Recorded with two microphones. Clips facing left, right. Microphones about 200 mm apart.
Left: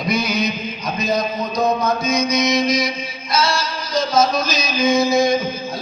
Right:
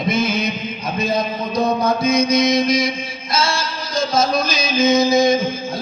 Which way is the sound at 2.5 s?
50° right (ahead or behind).